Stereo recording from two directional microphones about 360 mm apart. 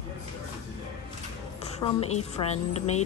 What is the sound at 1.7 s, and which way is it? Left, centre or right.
A woman's voice, centre.